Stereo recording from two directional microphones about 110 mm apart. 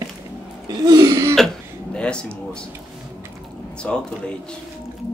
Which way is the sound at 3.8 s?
10° left (ahead or behind).